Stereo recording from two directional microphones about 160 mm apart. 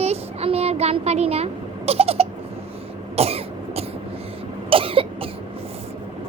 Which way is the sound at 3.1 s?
40° right (ahead or behind).